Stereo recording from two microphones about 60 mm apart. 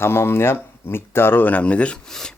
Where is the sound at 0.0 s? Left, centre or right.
Left.